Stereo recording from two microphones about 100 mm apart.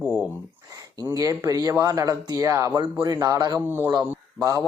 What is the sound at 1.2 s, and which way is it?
Speech, 35° right (ahead or behind).